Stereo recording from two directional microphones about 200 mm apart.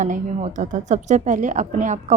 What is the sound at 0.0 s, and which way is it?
A woman's voice, 35° right (ahead or behind).